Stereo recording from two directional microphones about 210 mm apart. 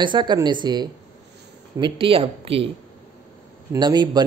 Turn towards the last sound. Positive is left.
turn(degrees=-20)  # may be behind; listen again after turning